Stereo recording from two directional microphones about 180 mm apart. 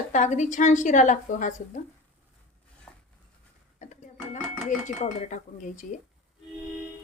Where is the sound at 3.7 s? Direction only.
40° left (ahead or behind).